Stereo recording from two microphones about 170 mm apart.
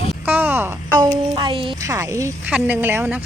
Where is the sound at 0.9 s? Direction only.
25° right (ahead or behind).